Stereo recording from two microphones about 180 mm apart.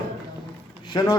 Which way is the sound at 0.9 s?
25° left (ahead or behind).